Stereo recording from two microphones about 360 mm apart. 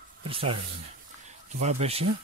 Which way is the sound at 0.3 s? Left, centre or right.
Centre.